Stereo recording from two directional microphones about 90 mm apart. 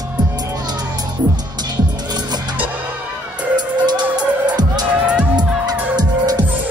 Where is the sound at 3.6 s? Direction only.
50° right (ahead or behind).